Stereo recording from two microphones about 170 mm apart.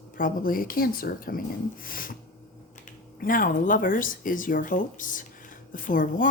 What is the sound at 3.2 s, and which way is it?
A woman's voice, 55° left (ahead or behind).